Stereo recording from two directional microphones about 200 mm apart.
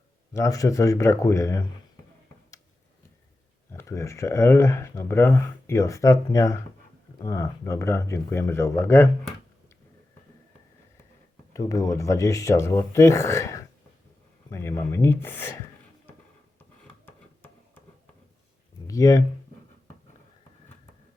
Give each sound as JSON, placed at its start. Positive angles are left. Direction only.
{"t": 0.3, "sound": "speech", "side_deg": 15}
{"t": 3.7, "sound": "speech", "side_deg": 15}
{"t": 11.5, "sound": "speech", "side_deg": 15}
{"t": 16.8, "sound": "a sound", "side_deg": 10}
{"t": 18.9, "sound": "speech", "side_deg": 15}